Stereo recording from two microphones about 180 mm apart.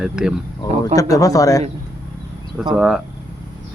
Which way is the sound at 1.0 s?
20° left (ahead or behind).